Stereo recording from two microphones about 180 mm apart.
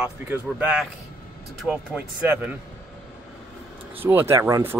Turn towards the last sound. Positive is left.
turn(degrees=-15)  # may be behind; listen again after turning